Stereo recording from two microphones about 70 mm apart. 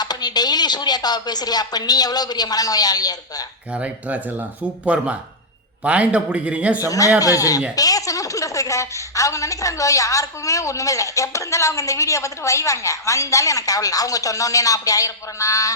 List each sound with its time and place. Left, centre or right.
0.0 s speech: left
3.7 s a man's voice: centre
6.7 s a woman's voice: left